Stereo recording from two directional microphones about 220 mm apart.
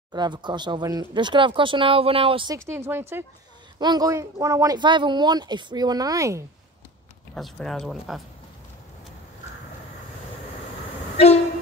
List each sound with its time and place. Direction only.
0.1 s speech: 20° right (ahead or behind)
7.3 s speech: centre (ahead or behind)